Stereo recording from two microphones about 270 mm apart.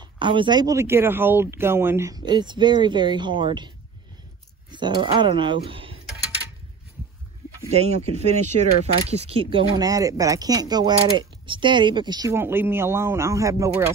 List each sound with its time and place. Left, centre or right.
0.0 s speech: centre
7.7 s speech: right